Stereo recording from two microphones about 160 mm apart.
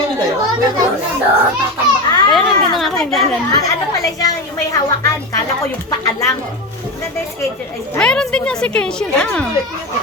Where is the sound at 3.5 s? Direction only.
20° left (ahead or behind).